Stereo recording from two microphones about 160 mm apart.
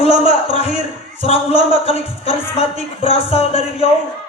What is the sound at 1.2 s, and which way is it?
Speech, 40° left (ahead or behind).